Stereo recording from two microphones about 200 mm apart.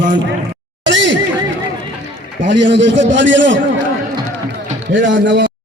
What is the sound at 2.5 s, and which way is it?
A man's voice, 65° right (ahead or behind).